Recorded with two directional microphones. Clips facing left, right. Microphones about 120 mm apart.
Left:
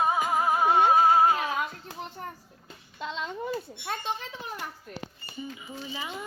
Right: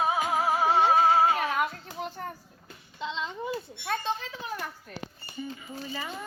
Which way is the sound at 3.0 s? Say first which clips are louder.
Right 1 dB; 50° left (ahead or behind).